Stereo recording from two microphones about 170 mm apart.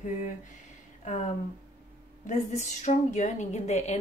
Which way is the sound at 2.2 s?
45° left (ahead or behind).